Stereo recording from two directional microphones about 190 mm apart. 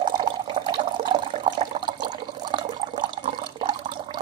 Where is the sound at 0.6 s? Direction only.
25° right (ahead or behind).